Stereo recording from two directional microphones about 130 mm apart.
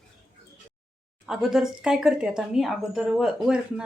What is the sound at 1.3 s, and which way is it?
Speech, 5° right (ahead or behind).